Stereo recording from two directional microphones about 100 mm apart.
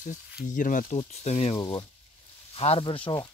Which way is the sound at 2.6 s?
65° left (ahead or behind).